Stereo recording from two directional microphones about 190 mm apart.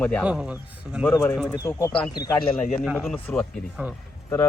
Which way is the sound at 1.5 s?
15° left (ahead or behind).